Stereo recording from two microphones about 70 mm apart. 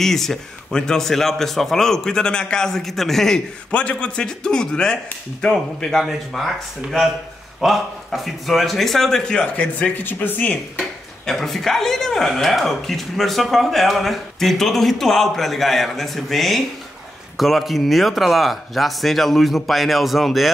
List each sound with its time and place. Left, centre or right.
0.0 s speech: centre
3.7 s a man's voice: centre
9.6 s speech: left
10.8 s speech: centre